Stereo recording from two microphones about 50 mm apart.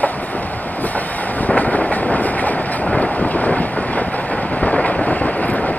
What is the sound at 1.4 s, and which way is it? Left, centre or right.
Vehicle, left.